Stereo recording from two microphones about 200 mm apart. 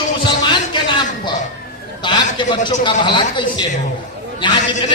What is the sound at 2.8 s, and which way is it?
A man's voice, 25° left (ahead or behind).